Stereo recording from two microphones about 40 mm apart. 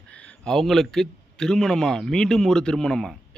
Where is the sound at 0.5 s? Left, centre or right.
Centre.